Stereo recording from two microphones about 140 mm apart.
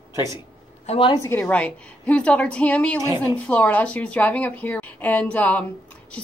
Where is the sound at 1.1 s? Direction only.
20° left (ahead or behind).